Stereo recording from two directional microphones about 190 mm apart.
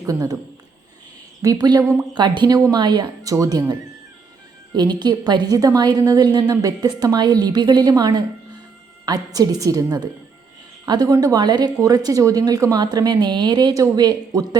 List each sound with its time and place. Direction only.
0.0 s speech: 20° right (ahead or behind)
1.4 s speech: 20° right (ahead or behind)